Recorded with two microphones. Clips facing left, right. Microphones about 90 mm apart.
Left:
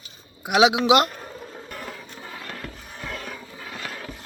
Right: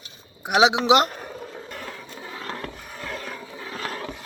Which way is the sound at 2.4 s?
30° right (ahead or behind).